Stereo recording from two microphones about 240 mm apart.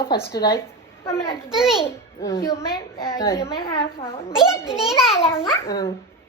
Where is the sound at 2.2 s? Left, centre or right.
Centre.